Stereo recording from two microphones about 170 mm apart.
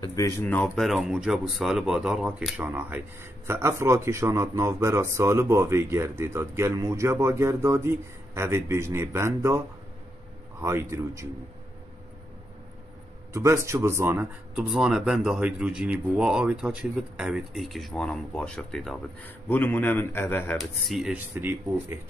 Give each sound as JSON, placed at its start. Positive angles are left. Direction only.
{"t": 0.0, "sound": "a man's voice", "side_deg": 20}
{"t": 0.8, "sound": "speech", "side_deg": 0}
{"t": 10.6, "sound": "speech", "side_deg": -15}
{"t": 13.3, "sound": "a man's voice", "side_deg": -15}
{"t": 20.5, "sound": "speech", "side_deg": 0}